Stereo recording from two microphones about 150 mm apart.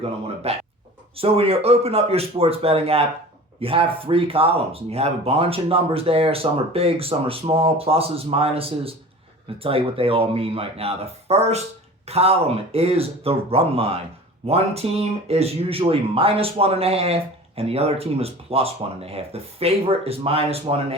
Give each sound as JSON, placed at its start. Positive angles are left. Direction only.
{"t": 0.4, "sound": "speech", "side_deg": -40}